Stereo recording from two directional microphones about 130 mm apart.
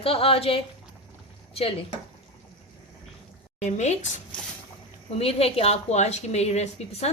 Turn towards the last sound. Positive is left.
turn(degrees=55)  # may be behind; listen again after turning